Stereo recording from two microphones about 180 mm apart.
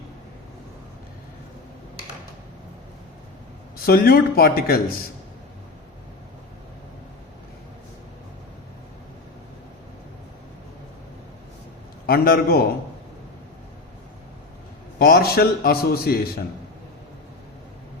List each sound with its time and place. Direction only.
3.8 s a man's voice: 55° left (ahead or behind)
12.0 s a man's voice: 55° left (ahead or behind)
14.9 s a man's voice: 55° left (ahead or behind)